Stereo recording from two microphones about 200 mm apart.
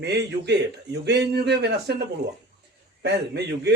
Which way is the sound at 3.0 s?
55° right (ahead or behind).